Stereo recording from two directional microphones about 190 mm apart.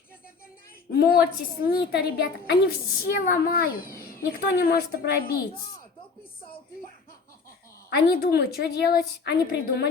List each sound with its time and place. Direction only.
0.9 s a woman's voice: 55° left (ahead or behind)
7.9 s a woman's voice: 55° left (ahead or behind)